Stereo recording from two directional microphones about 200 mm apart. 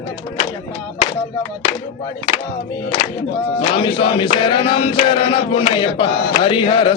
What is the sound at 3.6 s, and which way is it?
Music, 25° left (ahead or behind).